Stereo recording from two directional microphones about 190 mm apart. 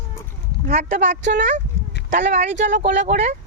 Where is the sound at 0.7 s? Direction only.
35° right (ahead or behind).